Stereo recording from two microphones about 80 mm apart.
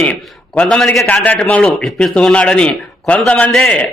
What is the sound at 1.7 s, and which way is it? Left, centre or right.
Speech, centre.